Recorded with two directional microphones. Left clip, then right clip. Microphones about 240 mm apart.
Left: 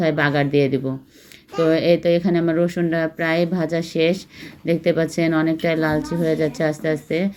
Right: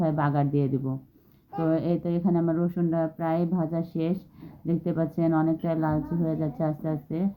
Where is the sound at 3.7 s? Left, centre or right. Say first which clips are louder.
Left 11 dB; centre.